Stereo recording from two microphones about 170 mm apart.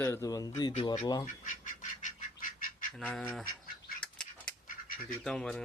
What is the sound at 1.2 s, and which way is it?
Duck, 50° left (ahead or behind).